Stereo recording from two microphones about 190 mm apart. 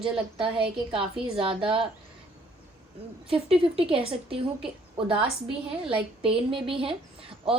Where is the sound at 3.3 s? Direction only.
30° right (ahead or behind).